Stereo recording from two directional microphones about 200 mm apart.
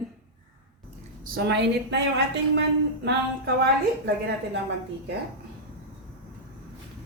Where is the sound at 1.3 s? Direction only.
60° right (ahead or behind).